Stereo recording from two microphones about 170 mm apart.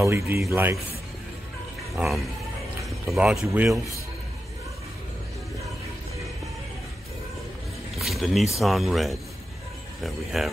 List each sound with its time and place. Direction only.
0.0 s speech: 15° right (ahead or behind)
2.0 s speech: centre (ahead or behind)
2.8 s a sound: centre (ahead or behind)
3.4 s speech: 15° right (ahead or behind)
8.0 s speech: centre (ahead or behind)